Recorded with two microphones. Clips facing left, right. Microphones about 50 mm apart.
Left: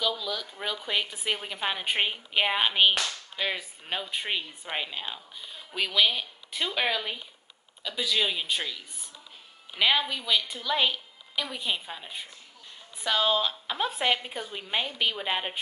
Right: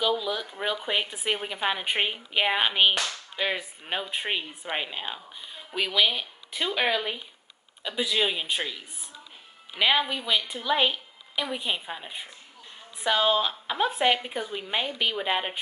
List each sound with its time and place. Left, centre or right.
0.0 s speech: centre